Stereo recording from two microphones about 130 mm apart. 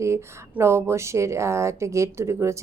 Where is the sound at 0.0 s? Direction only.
20° right (ahead or behind).